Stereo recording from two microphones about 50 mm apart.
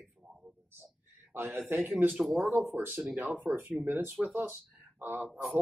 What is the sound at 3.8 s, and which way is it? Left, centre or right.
Speech, right.